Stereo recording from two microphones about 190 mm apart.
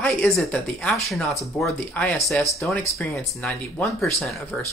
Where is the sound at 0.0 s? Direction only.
5° left (ahead or behind).